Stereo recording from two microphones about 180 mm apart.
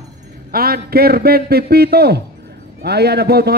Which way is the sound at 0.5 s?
55° right (ahead or behind).